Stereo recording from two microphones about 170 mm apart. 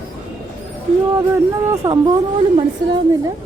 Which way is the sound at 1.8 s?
15° right (ahead or behind).